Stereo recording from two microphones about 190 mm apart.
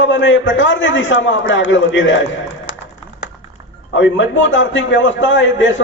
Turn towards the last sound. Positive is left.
turn(degrees=80)